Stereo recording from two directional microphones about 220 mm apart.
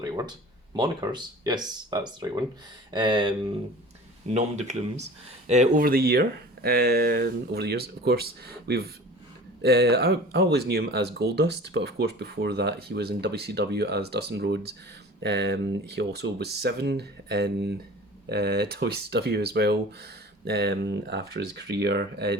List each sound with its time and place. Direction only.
0.0 s a sound: 20° right (ahead or behind)
0.8 s speech: 20° right (ahead or behind)
4.4 s speech: 30° right (ahead or behind); by 22.4 s 50° right (ahead or behind)